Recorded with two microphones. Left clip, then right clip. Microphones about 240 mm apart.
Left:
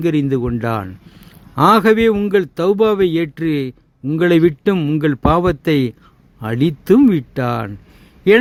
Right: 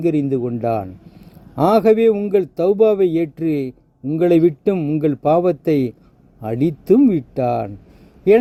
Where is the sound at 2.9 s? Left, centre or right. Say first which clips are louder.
Left 1 dB; left.